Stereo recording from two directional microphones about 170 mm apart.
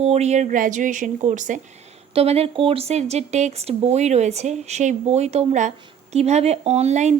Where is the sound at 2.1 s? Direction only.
35° right (ahead or behind).